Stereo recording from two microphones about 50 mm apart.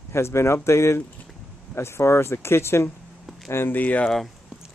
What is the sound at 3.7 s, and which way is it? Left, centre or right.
Speech, left.